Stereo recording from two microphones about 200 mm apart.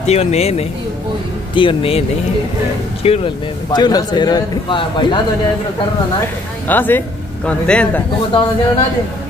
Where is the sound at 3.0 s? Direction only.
30° left (ahead or behind).